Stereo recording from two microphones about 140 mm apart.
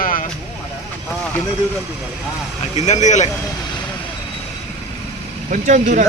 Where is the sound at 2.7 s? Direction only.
55° left (ahead or behind).